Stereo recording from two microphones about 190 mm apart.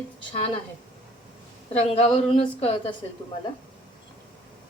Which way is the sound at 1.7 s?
35° left (ahead or behind).